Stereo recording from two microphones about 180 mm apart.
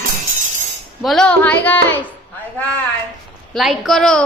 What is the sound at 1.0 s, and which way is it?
A woman's voice, 5° left (ahead or behind).